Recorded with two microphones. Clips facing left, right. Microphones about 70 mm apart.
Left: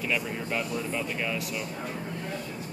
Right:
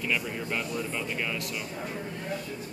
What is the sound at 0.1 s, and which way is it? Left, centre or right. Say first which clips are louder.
Speech: left 1 dB; centre.